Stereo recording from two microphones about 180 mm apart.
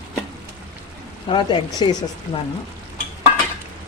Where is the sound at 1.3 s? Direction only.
25° left (ahead or behind).